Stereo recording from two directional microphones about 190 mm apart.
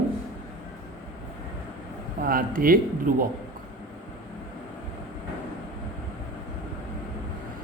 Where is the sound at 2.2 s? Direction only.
50° right (ahead or behind).